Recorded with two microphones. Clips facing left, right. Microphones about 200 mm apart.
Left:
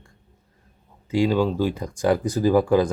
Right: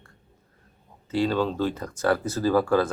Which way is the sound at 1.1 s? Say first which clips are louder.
Left 4 dB; 10° left (ahead or behind).